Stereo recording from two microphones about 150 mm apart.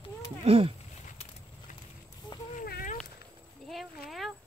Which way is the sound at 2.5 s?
70° left (ahead or behind).